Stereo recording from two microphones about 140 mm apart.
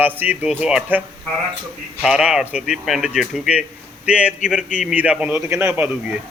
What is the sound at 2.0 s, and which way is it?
Speech, 5° right (ahead or behind).